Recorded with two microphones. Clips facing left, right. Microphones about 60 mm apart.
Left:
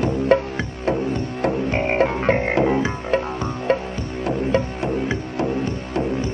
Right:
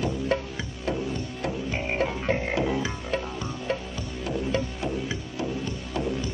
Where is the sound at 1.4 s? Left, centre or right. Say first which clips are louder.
Left 10 dB; left.